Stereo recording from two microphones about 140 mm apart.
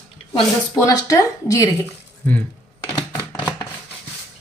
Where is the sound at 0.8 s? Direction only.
25° left (ahead or behind).